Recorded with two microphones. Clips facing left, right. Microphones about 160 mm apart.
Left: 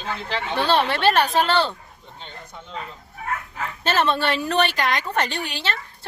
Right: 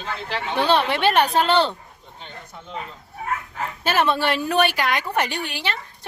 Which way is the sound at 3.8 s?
10° right (ahead or behind).